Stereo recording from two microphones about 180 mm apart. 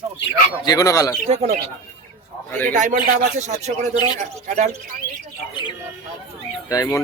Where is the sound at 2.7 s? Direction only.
45° right (ahead or behind).